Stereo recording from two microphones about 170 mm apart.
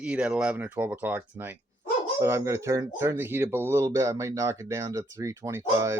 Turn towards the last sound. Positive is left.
turn(degrees=-15)  # may be behind; listen again after turning